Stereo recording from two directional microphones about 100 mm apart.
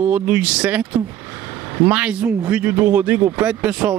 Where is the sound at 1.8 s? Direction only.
15° right (ahead or behind).